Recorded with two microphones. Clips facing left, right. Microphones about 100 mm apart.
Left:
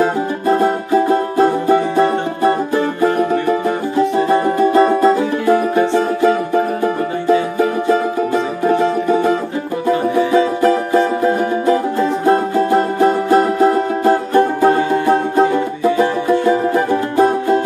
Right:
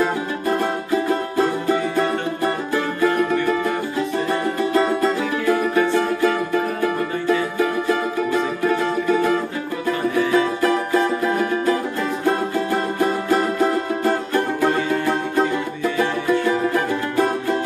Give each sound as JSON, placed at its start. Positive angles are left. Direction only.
{"t": 0.0, "sound": "music", "side_deg": 30}